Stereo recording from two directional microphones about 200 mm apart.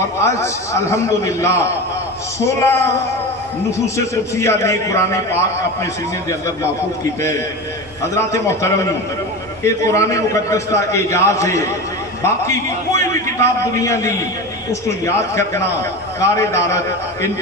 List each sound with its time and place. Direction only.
0.2 s a man's voice: 15° left (ahead or behind)
8.1 s a man's voice: 15° left (ahead or behind)
9.8 s a man's voice: 15° left (ahead or behind)